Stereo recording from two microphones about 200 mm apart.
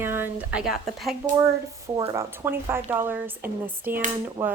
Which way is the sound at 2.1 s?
10° right (ahead or behind).